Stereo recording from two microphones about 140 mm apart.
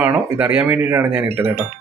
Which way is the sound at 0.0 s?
15° right (ahead or behind).